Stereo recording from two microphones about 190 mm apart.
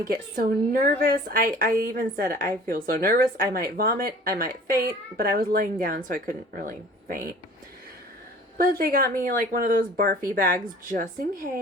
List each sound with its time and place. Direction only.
0.1 s a woman's voice: 50° right (ahead or behind)
8.5 s a woman's voice: 50° right (ahead or behind)